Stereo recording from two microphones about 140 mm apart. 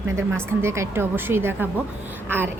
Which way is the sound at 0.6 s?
20° right (ahead or behind).